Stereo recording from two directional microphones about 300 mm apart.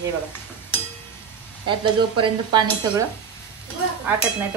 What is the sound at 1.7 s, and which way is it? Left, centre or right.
Speech, centre.